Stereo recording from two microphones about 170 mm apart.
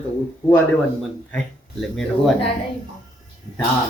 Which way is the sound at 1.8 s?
Centre (ahead or behind).